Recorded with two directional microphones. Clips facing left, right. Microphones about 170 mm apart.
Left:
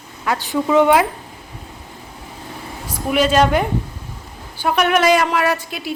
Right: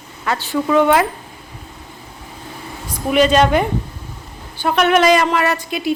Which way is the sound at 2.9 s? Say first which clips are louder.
Right 3 dB; 5° left (ahead or behind).